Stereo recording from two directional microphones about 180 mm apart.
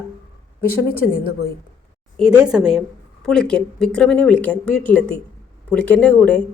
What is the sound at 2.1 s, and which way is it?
Speech, 5° right (ahead or behind).